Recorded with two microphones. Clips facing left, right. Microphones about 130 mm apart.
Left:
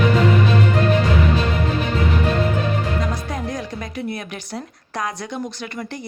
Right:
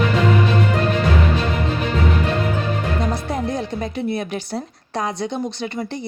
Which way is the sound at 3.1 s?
30° right (ahead or behind).